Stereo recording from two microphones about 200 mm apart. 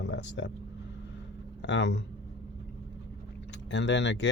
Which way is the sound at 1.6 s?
60° left (ahead or behind).